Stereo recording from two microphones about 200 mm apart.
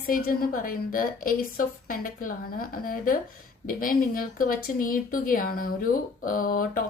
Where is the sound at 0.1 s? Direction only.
45° left (ahead or behind).